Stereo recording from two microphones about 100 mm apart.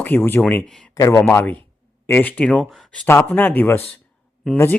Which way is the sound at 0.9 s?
35° left (ahead or behind).